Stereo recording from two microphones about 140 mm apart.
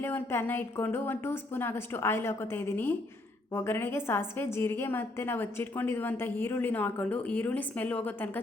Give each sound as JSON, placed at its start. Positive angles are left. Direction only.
{"t": 0.0, "sound": "a woman's voice", "side_deg": 15}